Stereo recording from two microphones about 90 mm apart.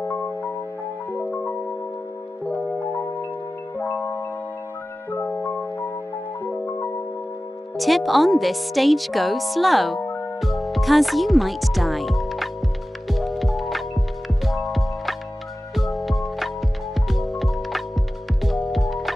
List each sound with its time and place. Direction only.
1.2 s music: 15° left (ahead or behind)
3.7 s marimba: 25° left (ahead or behind)
6.4 s music: 20° left (ahead or behind)
7.7 s speech: centre (ahead or behind)
13.1 s music: centre (ahead or behind)